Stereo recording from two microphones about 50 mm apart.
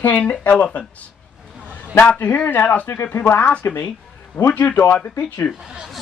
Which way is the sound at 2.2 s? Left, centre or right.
Left.